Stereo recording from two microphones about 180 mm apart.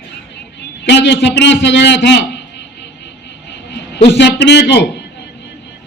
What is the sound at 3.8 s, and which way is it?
A man's voice, 75° left (ahead or behind).